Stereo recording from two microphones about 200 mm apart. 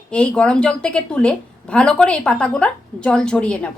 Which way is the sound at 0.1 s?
5° left (ahead or behind).